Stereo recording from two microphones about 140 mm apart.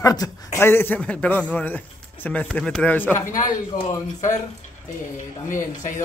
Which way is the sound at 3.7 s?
75° left (ahead or behind).